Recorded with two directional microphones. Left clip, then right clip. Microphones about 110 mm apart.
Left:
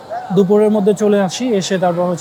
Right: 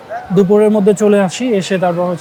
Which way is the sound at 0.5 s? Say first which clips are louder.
Right 3 dB; 5° right (ahead or behind).